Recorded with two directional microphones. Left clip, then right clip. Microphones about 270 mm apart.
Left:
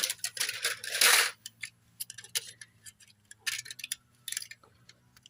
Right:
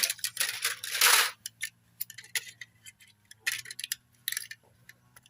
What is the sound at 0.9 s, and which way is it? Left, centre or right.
Coin, centre.